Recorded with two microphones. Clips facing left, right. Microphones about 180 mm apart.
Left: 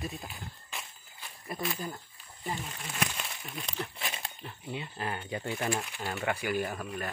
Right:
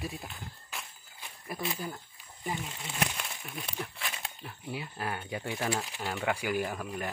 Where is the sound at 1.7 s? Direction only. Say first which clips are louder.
Even; 5° right (ahead or behind).